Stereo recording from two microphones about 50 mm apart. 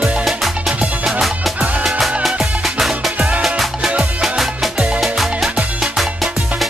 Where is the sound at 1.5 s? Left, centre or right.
Right.